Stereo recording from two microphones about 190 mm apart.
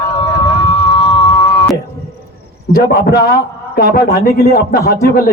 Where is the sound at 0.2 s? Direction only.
30° left (ahead or behind).